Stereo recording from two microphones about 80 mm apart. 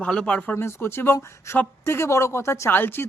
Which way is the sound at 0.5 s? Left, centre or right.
Left.